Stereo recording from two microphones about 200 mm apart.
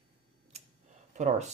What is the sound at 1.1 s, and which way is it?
Speech, 35° right (ahead or behind).